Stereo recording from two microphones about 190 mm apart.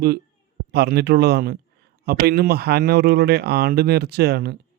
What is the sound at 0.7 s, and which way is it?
Speech, 60° right (ahead or behind).